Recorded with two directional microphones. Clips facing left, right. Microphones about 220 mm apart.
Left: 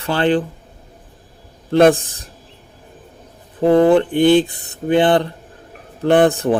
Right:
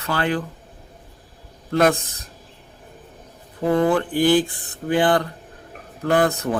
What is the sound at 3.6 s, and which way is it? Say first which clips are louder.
A man's voice: left 7 dB; 30° left (ahead or behind).